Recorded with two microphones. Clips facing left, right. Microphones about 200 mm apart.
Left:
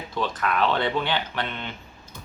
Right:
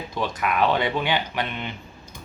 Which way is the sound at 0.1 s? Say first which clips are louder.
Even; 10° right (ahead or behind).